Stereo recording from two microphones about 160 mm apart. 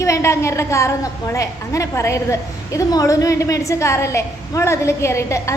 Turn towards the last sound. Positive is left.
turn(degrees=20)  # may be behind; listen again after turning